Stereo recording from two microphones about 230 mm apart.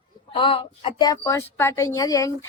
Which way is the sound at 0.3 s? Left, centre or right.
Left.